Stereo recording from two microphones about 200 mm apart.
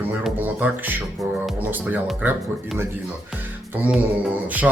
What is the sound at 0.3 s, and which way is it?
Speech, 10° right (ahead or behind).